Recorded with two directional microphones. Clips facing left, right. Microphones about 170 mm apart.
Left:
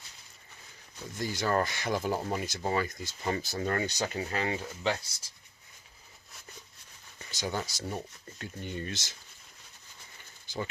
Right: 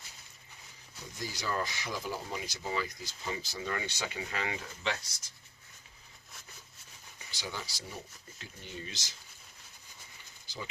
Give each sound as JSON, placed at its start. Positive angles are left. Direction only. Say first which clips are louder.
{"t": 1.2, "sound": "speech", "louder": "left 7 dB", "side_deg": 55}
{"t": 7.3, "sound": "speech", "louder": "left 7 dB", "side_deg": 45}